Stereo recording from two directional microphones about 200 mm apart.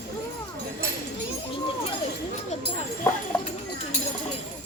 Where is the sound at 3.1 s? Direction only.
10° left (ahead or behind).